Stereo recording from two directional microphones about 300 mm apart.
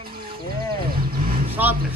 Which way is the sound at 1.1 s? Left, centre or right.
Right.